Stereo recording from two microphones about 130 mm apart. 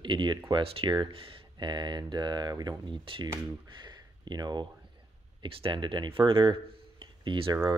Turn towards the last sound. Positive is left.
turn(degrees=-40)  # may be behind; listen again after turning